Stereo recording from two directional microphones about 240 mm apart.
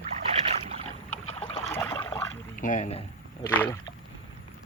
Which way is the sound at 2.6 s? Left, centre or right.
Left.